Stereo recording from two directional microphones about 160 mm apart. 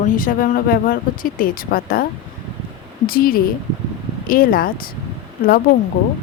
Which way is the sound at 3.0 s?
65° left (ahead or behind).